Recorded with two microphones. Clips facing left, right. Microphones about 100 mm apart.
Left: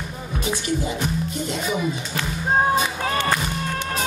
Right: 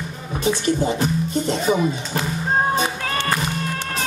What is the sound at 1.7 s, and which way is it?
Speech, 40° right (ahead or behind).